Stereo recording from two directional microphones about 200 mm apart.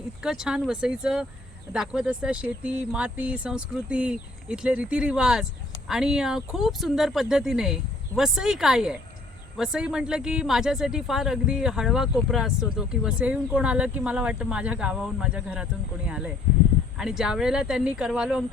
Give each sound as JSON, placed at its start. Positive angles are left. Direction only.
{"t": 0.2, "sound": "speech", "side_deg": -5}